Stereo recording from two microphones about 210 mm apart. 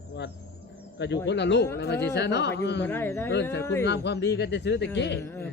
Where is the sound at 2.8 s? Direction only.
10° left (ahead or behind).